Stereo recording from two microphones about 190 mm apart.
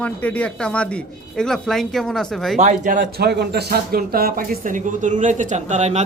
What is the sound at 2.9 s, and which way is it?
Speech, 60° right (ahead or behind).